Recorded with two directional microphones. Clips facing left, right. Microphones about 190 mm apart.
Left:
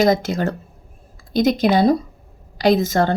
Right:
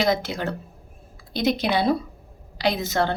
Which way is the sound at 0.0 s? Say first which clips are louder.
Left 6 dB; 45° left (ahead or behind).